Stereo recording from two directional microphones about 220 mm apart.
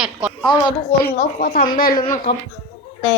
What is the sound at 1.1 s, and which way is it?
A woman's voice, 40° left (ahead or behind).